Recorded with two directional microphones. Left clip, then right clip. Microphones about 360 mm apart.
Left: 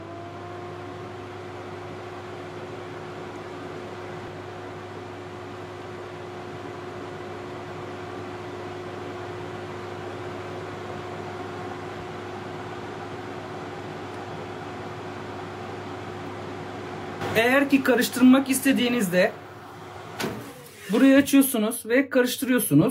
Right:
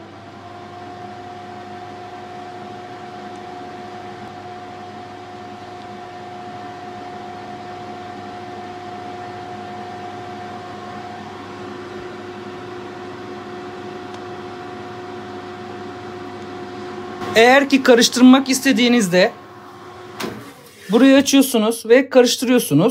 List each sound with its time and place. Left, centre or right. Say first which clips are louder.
17.3 s speech: right 9 dB; centre
21.0 s speech: right 5 dB; centre